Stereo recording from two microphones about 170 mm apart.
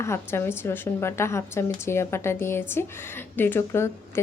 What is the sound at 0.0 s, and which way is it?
A woman's voice, 15° left (ahead or behind).